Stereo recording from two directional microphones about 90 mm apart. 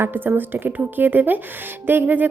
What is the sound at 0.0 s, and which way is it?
A woman's voice, 20° right (ahead or behind).